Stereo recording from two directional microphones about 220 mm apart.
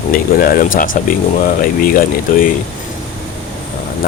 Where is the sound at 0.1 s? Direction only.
40° left (ahead or behind).